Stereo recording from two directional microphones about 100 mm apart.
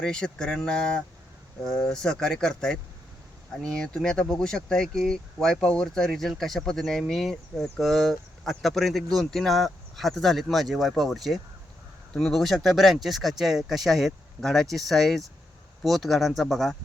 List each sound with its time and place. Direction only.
0.0 s speech: 5° left (ahead or behind)